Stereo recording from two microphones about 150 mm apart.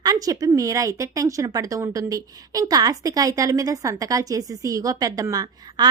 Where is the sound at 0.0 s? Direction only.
25° right (ahead or behind).